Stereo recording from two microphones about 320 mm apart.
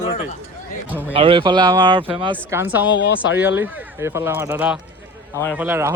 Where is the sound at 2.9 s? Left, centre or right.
Left.